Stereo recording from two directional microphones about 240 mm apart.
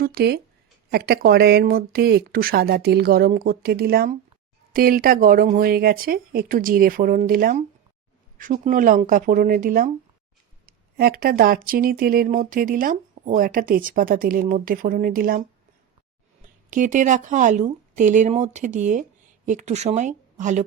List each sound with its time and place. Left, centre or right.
0.0 s speech: right
16.6 s speech: right